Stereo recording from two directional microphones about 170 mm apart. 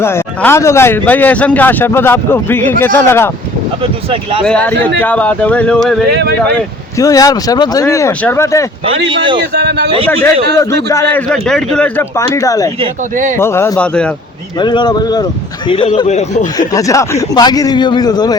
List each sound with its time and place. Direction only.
0.0 s speech: 15° left (ahead or behind)
4.1 s speech: 30° right (ahead or behind)
4.4 s speech: 5° left (ahead or behind)
7.0 s speech: 20° left (ahead or behind)
9.0 s speech: 30° right (ahead or behind)
9.4 s speech: 80° right
10.6 s speech: 15° left (ahead or behind)
11.3 s speech: 5° left (ahead or behind)
12.1 s speech: 15° left (ahead or behind)
14.6 s speech: 25° left (ahead or behind)
16.6 s speech: 20° left (ahead or behind)